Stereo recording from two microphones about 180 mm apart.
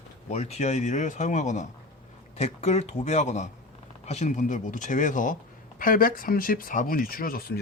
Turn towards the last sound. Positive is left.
turn(degrees=55)  # may be behind; listen again after turning